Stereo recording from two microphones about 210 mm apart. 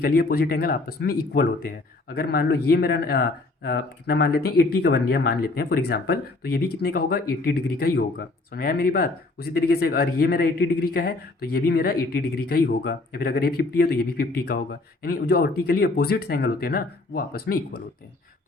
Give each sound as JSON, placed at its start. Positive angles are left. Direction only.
{"t": 0.0, "sound": "speech", "side_deg": 45}